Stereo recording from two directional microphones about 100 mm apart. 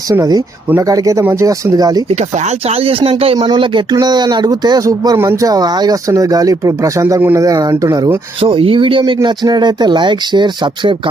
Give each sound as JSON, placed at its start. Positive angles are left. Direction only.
{"t": 0.1, "sound": "speech", "side_deg": -40}
{"t": 2.0, "sound": "speech", "side_deg": -90}
{"t": 3.5, "sound": "speech", "side_deg": -55}
{"t": 5.1, "sound": "speech", "side_deg": -20}
{"t": 5.4, "sound": "speech", "side_deg": -40}
{"t": 8.4, "sound": "speech", "side_deg": -65}